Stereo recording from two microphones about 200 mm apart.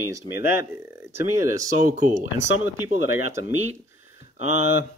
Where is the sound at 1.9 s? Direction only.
40° right (ahead or behind).